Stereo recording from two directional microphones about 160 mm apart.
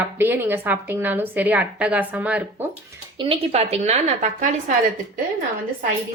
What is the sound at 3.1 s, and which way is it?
A woman's voice, 30° right (ahead or behind).